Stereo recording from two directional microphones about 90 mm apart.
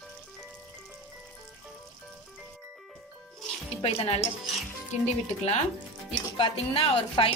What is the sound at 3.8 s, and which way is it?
Speech, 90° left.